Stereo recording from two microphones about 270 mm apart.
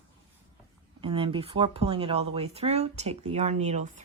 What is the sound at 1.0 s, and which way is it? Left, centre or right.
Speech, centre.